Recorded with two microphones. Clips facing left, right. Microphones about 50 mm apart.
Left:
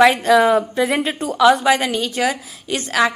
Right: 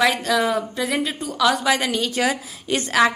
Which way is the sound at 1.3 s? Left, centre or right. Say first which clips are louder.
Left 6 dB; centre.